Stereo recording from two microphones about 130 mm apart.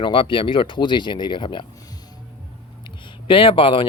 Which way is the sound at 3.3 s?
40° left (ahead or behind).